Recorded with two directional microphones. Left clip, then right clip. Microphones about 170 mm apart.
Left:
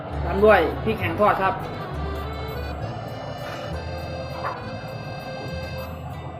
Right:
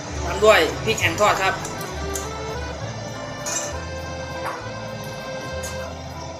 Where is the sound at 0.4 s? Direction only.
35° left (ahead or behind).